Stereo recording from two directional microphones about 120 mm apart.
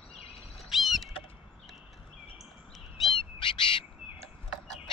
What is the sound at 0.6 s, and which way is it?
Rodents, centre (ahead or behind).